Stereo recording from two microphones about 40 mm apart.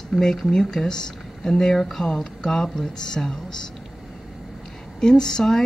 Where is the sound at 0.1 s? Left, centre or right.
Centre.